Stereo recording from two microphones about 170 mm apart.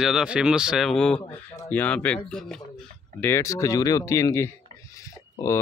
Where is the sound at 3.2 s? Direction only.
15° left (ahead or behind).